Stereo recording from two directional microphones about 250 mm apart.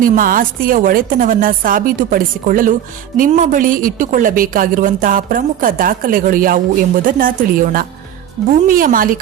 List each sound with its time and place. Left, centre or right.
0.0 s a woman's voice: right